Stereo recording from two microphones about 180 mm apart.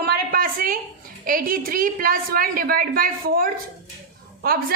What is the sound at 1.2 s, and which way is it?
A woman's voice, 50° right (ahead or behind).